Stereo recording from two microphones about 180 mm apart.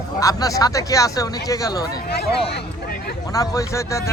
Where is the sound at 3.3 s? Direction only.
20° left (ahead or behind).